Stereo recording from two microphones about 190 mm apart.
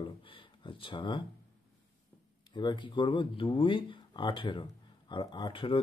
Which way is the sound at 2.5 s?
25° left (ahead or behind).